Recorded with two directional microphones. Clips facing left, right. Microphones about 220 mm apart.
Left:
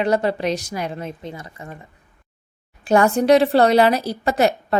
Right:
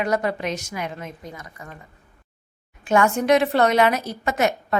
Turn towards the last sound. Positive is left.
turn(degrees=35)  # may be behind; listen again after turning